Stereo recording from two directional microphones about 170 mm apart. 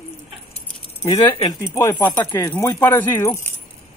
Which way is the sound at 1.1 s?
30° left (ahead or behind).